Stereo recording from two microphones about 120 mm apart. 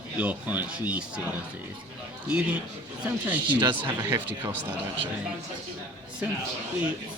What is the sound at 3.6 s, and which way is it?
Speech, 35° right (ahead or behind).